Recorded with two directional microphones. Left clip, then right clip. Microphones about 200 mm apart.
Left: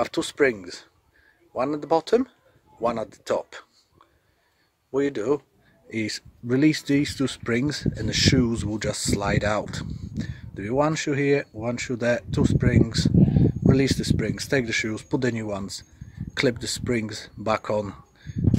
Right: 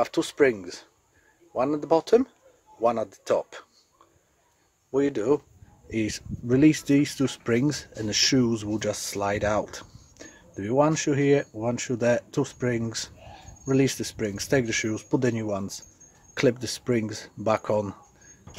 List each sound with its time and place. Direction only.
0.0 s speech: centre (ahead or behind)
4.9 s speech: centre (ahead or behind)